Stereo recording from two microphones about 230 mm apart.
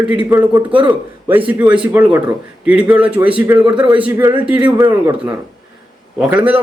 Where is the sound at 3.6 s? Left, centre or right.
Centre.